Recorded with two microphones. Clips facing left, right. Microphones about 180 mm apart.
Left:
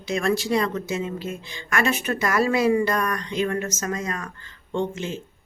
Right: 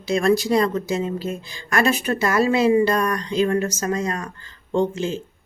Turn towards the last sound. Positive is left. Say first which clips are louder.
# right 5 dB
turn(degrees=-35)  # may be behind; listen again after turning